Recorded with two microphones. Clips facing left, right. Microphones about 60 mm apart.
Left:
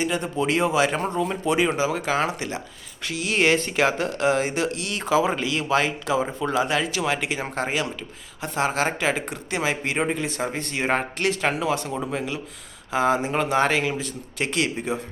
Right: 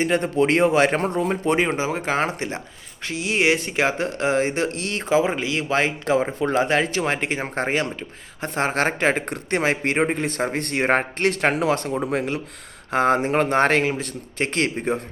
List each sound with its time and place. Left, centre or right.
0.0 s speech: right
3.1 s speech: right
13.8 s speech: right